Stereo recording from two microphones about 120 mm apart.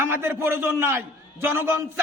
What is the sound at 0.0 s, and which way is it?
A man's voice, 20° right (ahead or behind).